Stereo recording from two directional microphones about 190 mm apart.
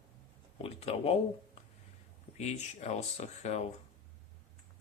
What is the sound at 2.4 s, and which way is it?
Speech, 35° left (ahead or behind).